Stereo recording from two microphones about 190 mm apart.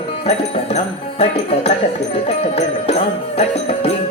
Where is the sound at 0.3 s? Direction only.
35° left (ahead or behind).